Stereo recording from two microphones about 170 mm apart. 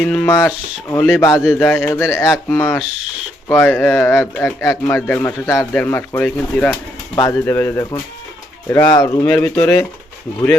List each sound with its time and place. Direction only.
0.0 s speech: 10° left (ahead or behind)